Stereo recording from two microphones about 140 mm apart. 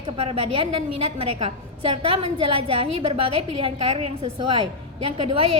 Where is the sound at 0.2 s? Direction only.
40° right (ahead or behind).